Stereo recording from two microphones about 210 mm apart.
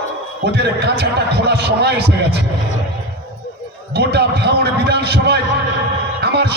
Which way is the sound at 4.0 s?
50° right (ahead or behind).